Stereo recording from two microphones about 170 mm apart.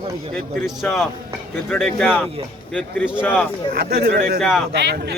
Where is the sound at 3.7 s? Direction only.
65° right (ahead or behind).